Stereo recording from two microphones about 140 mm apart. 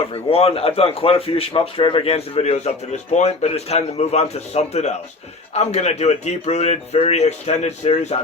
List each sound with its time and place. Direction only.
0.1 s a man's voice: 45° left (ahead or behind)